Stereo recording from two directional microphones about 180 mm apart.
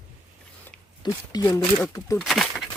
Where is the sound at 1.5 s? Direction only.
Centre (ahead or behind).